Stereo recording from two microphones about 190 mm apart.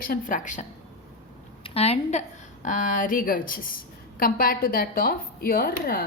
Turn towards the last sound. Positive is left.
turn(degrees=50)  # may be behind; listen again after turning